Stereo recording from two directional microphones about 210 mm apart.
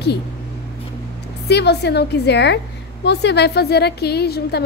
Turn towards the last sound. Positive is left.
turn(degrees=50)  # may be behind; listen again after turning